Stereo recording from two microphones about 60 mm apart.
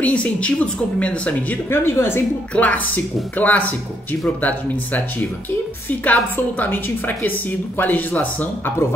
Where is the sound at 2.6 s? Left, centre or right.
Left.